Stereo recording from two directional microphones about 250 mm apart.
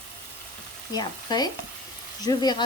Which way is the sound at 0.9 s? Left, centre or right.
Centre.